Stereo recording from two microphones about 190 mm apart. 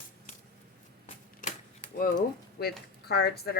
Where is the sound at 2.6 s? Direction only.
55° left (ahead or behind).